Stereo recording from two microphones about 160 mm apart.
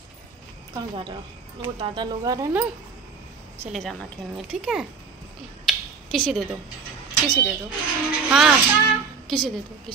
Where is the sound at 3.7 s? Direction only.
5° left (ahead or behind).